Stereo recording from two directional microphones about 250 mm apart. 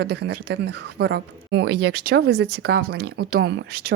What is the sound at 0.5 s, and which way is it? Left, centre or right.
Speech, right.